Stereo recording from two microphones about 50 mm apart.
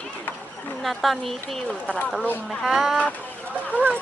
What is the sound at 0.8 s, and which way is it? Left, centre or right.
Speech, centre.